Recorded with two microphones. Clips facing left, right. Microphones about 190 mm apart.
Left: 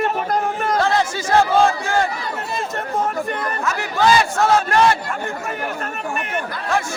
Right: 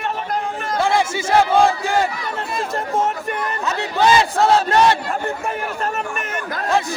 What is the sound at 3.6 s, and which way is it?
Speech, 20° right (ahead or behind).